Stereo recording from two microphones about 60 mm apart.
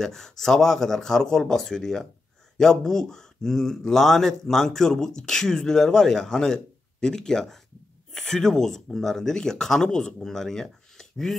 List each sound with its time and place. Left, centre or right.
0.0 s speech: centre